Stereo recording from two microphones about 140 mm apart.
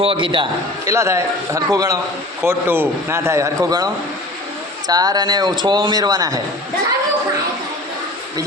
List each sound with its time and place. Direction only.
0.0 s a man's voice: 40° right (ahead or behind)
0.9 s a man's voice: 20° right (ahead or behind)